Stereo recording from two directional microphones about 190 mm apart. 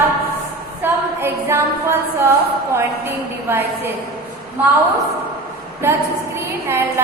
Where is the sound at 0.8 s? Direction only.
15° right (ahead or behind).